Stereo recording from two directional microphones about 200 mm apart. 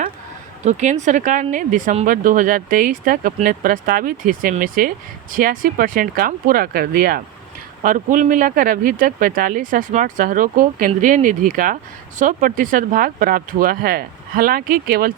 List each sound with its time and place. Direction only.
0.6 s speech: 35° right (ahead or behind)